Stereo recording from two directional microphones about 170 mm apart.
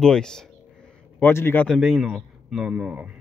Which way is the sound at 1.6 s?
Centre (ahead or behind).